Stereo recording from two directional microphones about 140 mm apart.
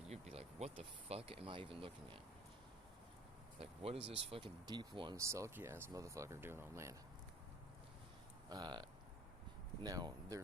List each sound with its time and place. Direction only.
0.0 s speech: 50° right (ahead or behind)
3.6 s speech: 45° right (ahead or behind)
5.1 s speech: 20° right (ahead or behind)
8.4 s speech: 30° right (ahead or behind)